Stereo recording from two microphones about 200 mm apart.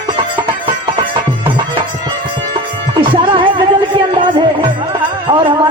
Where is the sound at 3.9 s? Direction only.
25° right (ahead or behind).